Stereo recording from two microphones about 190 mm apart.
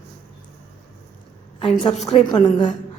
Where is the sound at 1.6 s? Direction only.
30° left (ahead or behind).